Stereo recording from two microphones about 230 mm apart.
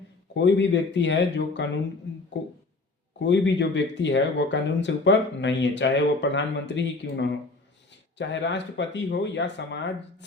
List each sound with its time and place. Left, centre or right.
0.3 s speech: left